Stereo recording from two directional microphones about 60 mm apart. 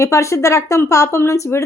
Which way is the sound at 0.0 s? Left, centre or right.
Left.